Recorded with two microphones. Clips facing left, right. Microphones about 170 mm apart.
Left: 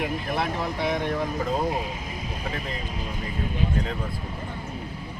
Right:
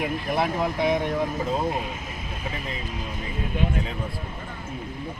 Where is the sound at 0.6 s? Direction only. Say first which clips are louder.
Right 3 dB; 15° right (ahead or behind).